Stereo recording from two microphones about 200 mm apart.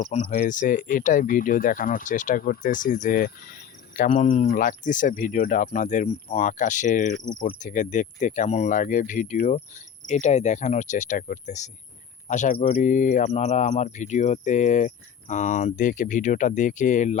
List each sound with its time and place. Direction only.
0.3 s speech: 40° left (ahead or behind)